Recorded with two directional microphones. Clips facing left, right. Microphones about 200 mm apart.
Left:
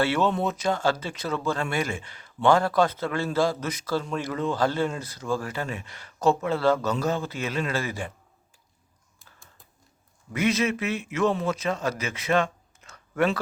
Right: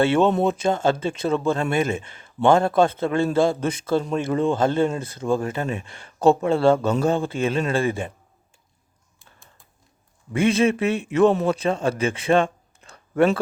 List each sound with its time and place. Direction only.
0.0 s speech: 25° right (ahead or behind)
10.3 s a man's voice: 30° right (ahead or behind)